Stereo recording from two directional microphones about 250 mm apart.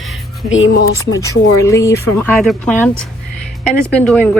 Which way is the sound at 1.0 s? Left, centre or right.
Centre.